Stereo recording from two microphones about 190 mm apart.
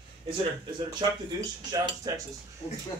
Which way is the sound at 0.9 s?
20° right (ahead or behind).